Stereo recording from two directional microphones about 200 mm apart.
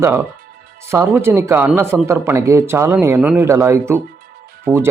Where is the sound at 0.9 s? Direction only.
10° right (ahead or behind).